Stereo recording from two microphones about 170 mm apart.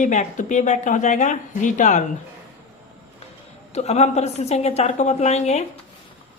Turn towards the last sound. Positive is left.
turn(degrees=40)  # may be behind; listen again after turning